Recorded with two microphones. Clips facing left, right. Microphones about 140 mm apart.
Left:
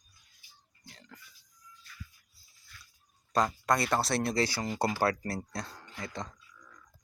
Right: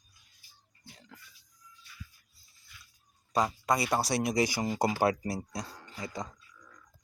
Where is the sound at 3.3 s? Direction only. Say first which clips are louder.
Even; 10° right (ahead or behind).